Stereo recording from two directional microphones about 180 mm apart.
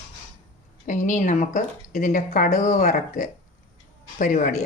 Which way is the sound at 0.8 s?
45° left (ahead or behind).